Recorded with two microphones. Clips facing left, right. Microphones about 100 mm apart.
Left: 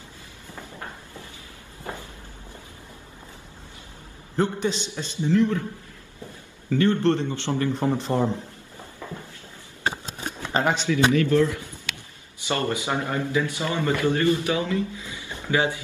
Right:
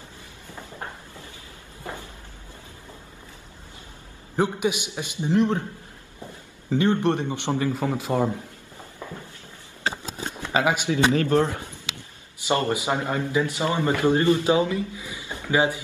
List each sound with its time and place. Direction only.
4.4 s a man's voice: 10° right (ahead or behind)
6.7 s a man's voice: 15° right (ahead or behind)
10.5 s speech: 10° right (ahead or behind)
11.1 s a man's voice: 35° right (ahead or behind)
12.4 s a man's voice: 20° right (ahead or behind)